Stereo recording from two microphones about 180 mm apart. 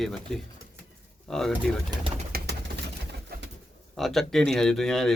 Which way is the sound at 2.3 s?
55° right (ahead or behind).